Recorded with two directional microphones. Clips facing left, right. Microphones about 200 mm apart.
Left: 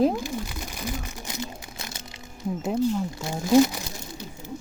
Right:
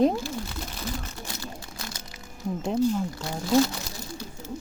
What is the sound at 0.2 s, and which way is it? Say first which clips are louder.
Crumpling: left 1 dB; 15° left (ahead or behind).